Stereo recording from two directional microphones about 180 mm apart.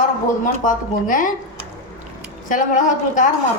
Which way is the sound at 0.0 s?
45° left (ahead or behind).